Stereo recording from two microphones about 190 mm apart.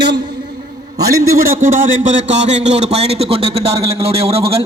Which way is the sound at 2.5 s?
35° right (ahead or behind).